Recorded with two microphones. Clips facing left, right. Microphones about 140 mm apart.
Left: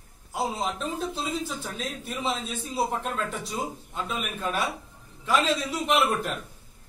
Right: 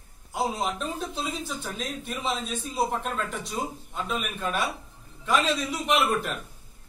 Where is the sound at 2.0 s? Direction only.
Centre (ahead or behind).